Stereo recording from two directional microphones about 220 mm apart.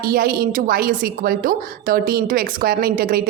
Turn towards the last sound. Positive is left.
turn(degrees=-40)  # may be behind; listen again after turning